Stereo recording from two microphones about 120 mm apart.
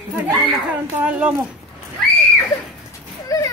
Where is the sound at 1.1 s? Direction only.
10° right (ahead or behind).